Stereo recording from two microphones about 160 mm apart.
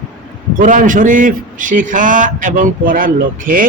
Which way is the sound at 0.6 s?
55° right (ahead or behind).